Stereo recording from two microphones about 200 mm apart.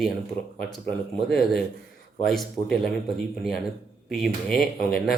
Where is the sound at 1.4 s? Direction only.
50° left (ahead or behind).